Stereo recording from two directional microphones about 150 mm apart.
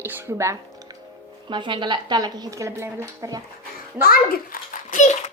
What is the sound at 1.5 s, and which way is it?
Speech, 30° right (ahead or behind).